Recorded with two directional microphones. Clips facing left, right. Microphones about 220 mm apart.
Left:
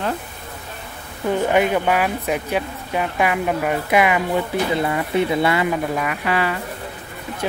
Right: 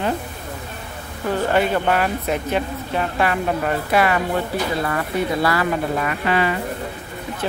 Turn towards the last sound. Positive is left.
turn(degrees=15)  # may be behind; listen again after turning